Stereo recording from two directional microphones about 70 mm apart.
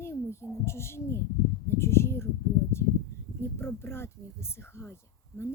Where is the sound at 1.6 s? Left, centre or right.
Left.